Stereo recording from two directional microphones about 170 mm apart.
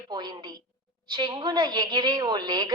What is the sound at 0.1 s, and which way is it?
A woman's voice, 25° right (ahead or behind).